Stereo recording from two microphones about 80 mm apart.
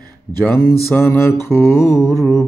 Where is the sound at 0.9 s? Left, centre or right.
Left.